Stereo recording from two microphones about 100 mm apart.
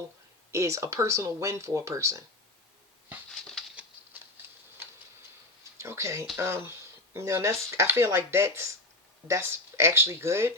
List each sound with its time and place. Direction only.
0.5 s speech: 30° right (ahead or behind)
4.0 s typewriter: 20° right (ahead or behind)
5.8 s speech: 30° right (ahead or behind)